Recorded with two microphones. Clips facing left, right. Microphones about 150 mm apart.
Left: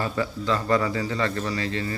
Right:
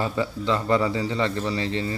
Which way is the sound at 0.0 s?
20° right (ahead or behind).